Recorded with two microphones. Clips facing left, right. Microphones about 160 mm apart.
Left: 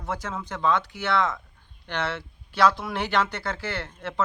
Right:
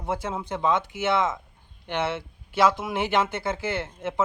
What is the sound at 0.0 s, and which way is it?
Speech, 25° right (ahead or behind).